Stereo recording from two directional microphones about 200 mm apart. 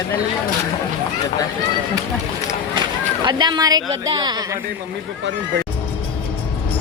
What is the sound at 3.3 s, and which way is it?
A woman's voice, 20° right (ahead or behind).